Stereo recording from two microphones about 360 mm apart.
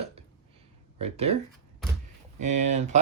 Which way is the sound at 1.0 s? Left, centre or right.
Centre.